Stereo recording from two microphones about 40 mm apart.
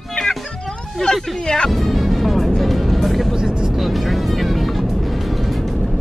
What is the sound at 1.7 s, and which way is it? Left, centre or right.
Music, centre.